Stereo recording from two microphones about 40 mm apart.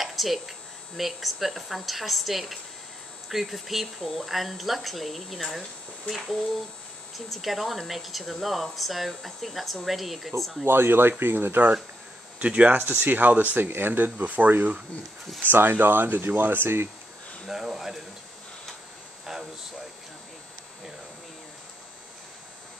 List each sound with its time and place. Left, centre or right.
0.0 s speech: centre
10.6 s speech: right
12.4 s speech: right
12.7 s speech: right
13.6 s speech: right
15.5 s speech: right
17.5 s speech: centre
19.3 s a sound: centre